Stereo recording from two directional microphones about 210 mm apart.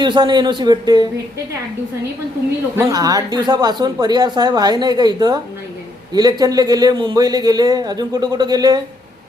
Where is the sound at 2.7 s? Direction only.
15° right (ahead or behind).